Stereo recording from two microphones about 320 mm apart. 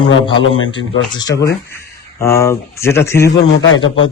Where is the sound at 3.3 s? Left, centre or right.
Left.